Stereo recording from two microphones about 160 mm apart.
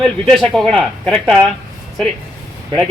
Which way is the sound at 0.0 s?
5° left (ahead or behind).